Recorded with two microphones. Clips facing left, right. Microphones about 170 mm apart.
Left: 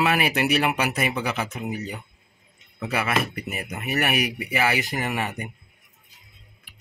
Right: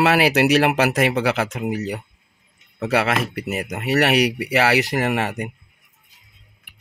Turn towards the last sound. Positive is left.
turn(degrees=-80)